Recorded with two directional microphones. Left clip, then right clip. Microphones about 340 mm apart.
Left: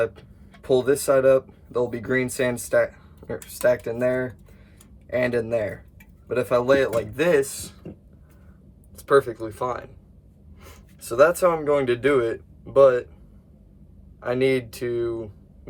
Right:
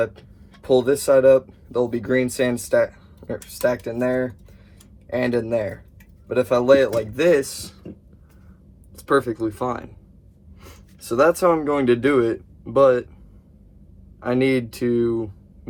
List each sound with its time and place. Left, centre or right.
0.0 s a man's voice: centre
9.0 s speech: centre
11.2 s speech: centre
14.2 s speech: centre